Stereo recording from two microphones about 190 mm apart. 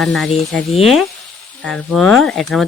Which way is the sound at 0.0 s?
Centre (ahead or behind).